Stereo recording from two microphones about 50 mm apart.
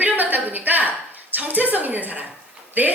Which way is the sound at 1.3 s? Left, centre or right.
Right.